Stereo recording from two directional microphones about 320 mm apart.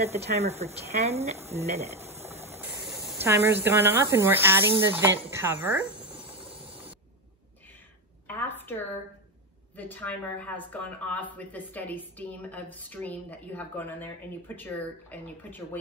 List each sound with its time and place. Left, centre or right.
0.0 s speech: centre
1.9 s speech: centre
8.3 s a sound: centre
9.8 s speech: centre